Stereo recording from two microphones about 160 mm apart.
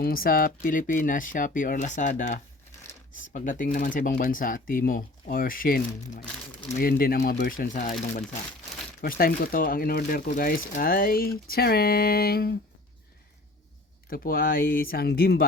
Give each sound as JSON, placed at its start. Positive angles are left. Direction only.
{"t": 0.0, "sound": "speech", "side_deg": 65}
{"t": 9.0, "sound": "speech", "side_deg": 70}
{"t": 14.1, "sound": "speech", "side_deg": 65}